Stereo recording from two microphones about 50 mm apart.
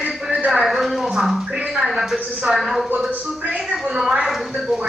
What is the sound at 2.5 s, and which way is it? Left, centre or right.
Speech, centre.